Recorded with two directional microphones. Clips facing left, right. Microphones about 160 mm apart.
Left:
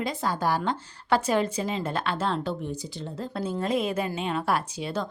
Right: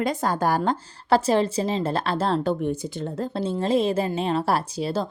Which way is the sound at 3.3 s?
25° right (ahead or behind).